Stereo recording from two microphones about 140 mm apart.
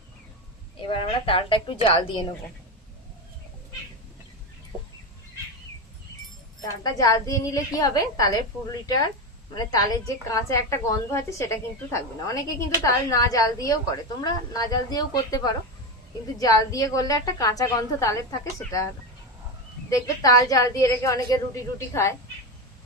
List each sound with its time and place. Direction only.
0.8 s a woman's voice: 40° left (ahead or behind)
6.8 s a woman's voice: 25° left (ahead or behind)
9.6 s a woman's voice: 25° left (ahead or behind)
19.9 s a woman's voice: 25° left (ahead or behind)